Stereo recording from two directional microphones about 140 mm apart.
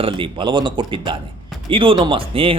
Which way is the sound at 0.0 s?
35° right (ahead or behind).